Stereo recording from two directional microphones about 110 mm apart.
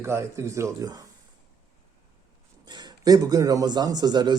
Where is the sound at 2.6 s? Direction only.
40° right (ahead or behind).